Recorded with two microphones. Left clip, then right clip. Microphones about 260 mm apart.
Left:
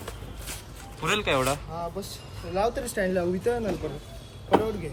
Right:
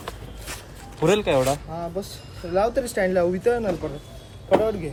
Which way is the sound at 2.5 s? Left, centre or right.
Right.